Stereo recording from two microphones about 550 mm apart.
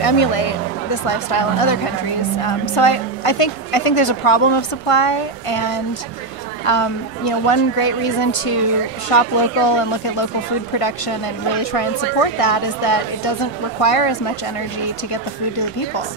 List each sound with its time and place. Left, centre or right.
0.0 s a woman's voice: left